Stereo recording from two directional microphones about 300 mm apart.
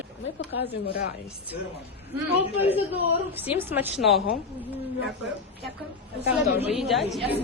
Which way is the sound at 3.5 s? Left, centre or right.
Centre.